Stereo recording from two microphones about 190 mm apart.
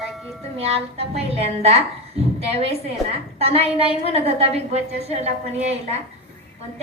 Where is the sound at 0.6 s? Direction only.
30° right (ahead or behind).